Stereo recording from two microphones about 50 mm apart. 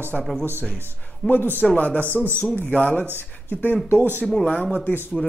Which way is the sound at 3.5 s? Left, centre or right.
Left.